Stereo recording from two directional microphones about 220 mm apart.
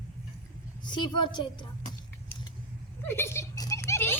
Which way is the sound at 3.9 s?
10° left (ahead or behind).